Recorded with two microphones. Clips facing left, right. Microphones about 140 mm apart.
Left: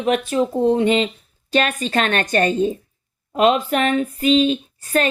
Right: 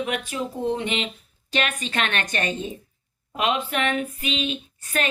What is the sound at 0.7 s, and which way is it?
A woman's voice, 40° left (ahead or behind).